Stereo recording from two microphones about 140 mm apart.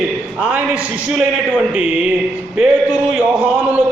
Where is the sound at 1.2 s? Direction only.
10° right (ahead or behind).